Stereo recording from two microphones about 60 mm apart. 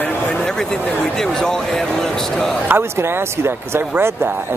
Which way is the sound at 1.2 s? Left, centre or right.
Centre.